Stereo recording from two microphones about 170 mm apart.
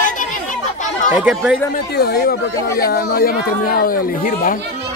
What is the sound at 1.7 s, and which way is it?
Speech, 65° left (ahead or behind).